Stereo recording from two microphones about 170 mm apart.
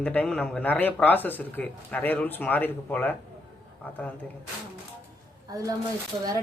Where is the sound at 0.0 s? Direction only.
5° left (ahead or behind).